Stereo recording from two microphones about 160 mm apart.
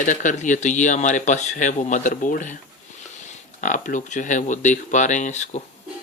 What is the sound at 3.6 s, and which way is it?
Speech, 55° left (ahead or behind).